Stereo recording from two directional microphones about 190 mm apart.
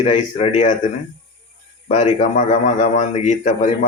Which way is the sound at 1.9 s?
35° left (ahead or behind).